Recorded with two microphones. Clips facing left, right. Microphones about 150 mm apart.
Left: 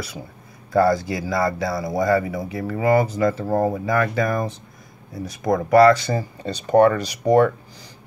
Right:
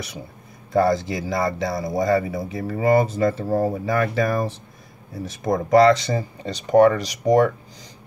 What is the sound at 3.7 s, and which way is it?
Speech, 30° right (ahead or behind).